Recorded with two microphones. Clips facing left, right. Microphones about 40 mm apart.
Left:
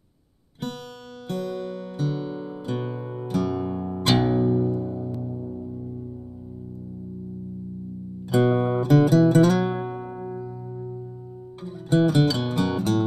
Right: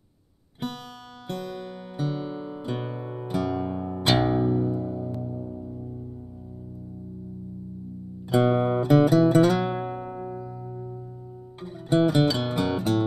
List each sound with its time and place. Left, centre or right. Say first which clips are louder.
1.3 s music: left 5 dB; centre
8.3 s music: left 1 dB; centre